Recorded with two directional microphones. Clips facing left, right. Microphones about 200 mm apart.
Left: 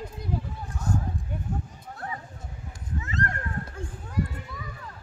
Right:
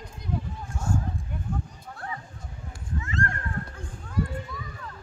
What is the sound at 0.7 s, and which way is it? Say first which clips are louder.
Clip-clop: even; 40° left (ahead or behind).